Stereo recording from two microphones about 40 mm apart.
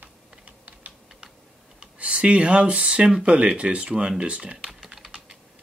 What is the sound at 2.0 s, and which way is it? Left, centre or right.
Speech, right.